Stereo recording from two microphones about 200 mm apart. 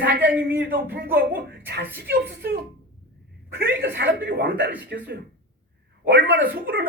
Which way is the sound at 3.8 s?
55° right (ahead or behind).